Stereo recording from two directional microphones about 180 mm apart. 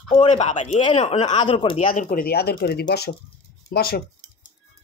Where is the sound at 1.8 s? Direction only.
50° left (ahead or behind).